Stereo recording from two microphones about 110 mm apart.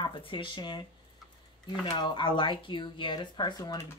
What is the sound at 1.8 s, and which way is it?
Speech, 45° left (ahead or behind).